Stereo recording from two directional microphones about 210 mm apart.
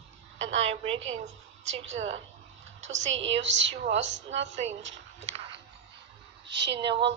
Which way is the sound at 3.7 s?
35° right (ahead or behind).